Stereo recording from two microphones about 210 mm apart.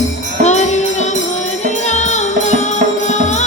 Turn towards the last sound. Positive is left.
turn(degrees=35)  # may be behind; listen again after turning